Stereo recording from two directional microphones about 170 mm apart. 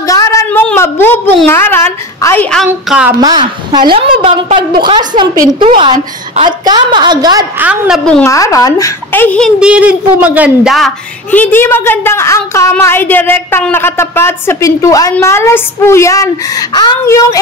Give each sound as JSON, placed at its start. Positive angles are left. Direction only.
{"t": 0.0, "sound": "a woman's voice", "side_deg": 20}
{"t": 2.9, "sound": "a woman's voice", "side_deg": -5}
{"t": 3.2, "sound": "a woman's voice", "side_deg": -25}
{"t": 7.5, "sound": "speech", "side_deg": -10}
{"t": 8.3, "sound": "speech", "side_deg": 20}
{"t": 9.6, "sound": "speech", "side_deg": -5}
{"t": 11.2, "sound": "a woman's voice", "side_deg": 10}